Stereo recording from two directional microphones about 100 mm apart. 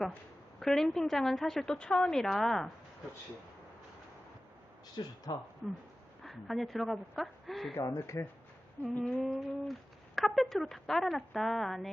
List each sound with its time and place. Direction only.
0.6 s a woman's voice: 5° left (ahead or behind)
4.9 s speech: 45° left (ahead or behind)
5.6 s a woman's voice: 5° right (ahead or behind)
7.8 s speech: 30° left (ahead or behind)
9.1 s a woman's voice: centre (ahead or behind)